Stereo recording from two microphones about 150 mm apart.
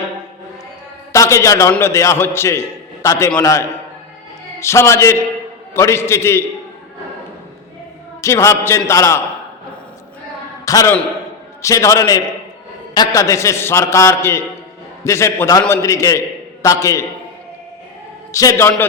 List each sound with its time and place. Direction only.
1.1 s a man's voice: 20° left (ahead or behind)
8.2 s a man's voice: 20° left (ahead or behind)
10.7 s a man's voice: 25° left (ahead or behind)
18.3 s a man's voice: 20° left (ahead or behind)